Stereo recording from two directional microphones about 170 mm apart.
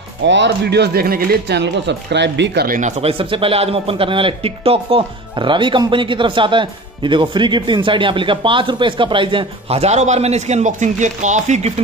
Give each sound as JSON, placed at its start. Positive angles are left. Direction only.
{"t": 0.2, "sound": "speech", "side_deg": -90}
{"t": 3.0, "sound": "a man's voice", "side_deg": -35}